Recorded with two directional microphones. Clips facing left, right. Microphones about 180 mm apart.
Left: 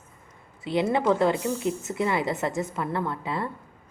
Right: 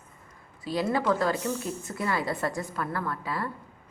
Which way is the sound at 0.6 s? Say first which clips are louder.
Left 3 dB; 25° left (ahead or behind).